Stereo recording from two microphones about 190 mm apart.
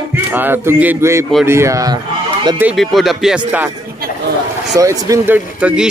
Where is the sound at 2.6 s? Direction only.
Centre (ahead or behind).